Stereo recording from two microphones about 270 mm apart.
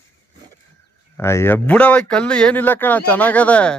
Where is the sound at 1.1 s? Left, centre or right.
Centre.